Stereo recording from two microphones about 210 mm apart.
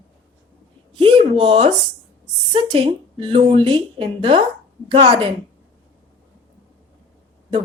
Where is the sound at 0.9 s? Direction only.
25° right (ahead or behind).